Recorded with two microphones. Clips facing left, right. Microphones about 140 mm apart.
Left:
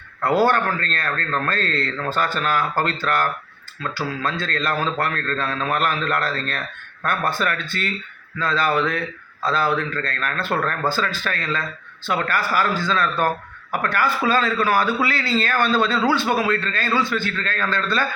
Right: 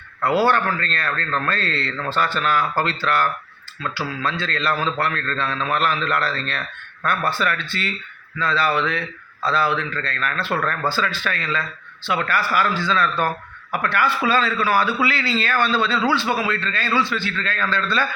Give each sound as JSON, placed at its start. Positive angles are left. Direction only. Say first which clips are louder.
{"t": 0.2, "sound": "a man's voice", "louder": "even", "side_deg": 45}